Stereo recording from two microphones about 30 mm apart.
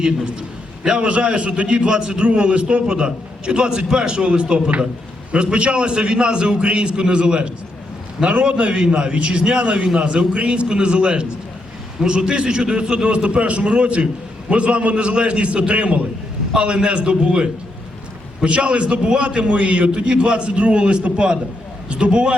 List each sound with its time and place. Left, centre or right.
0.9 s a man's voice: right